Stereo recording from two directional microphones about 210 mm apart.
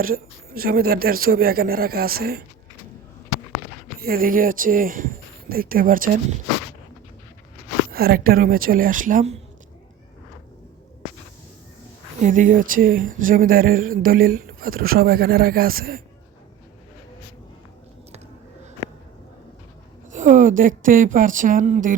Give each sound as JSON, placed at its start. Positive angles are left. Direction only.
{"t": 0.0, "sound": "speech", "side_deg": -45}
{"t": 4.0, "sound": "speech", "side_deg": -45}
{"t": 7.9, "sound": "speech", "side_deg": -45}
{"t": 12.2, "sound": "speech", "side_deg": -40}
{"t": 20.1, "sound": "speech", "side_deg": -35}